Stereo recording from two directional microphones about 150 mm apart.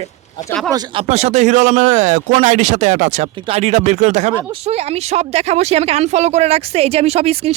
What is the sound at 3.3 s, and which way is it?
Speech, 35° right (ahead or behind).